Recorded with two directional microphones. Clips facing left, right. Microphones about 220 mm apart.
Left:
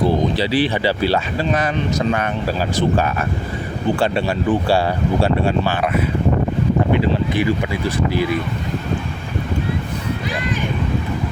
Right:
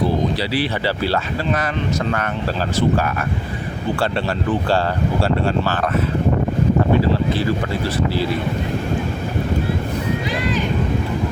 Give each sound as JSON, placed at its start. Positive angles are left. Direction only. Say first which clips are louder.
{"t": 0.3, "sound": "speech", "louder": "left 3 dB", "side_deg": 20}
{"t": 5.2, "sound": "speech", "louder": "left 1 dB", "side_deg": 15}
{"t": 7.0, "sound": "speech", "louder": "left 1 dB", "side_deg": 15}